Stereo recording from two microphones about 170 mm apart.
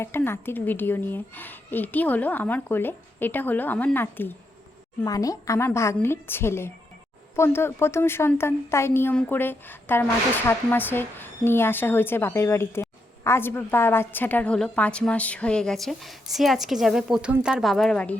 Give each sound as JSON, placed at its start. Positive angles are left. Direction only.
{"t": 0.0, "sound": "speech", "side_deg": 15}